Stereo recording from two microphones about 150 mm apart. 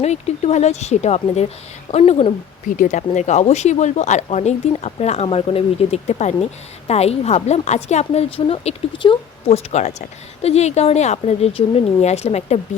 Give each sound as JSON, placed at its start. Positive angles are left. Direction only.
{"t": 0.0, "sound": "speech", "side_deg": 45}
{"t": 2.7, "sound": "speech", "side_deg": 55}
{"t": 9.7, "sound": "speech", "side_deg": 50}